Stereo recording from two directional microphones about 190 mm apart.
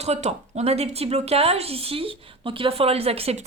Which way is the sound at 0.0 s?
35° right (ahead or behind).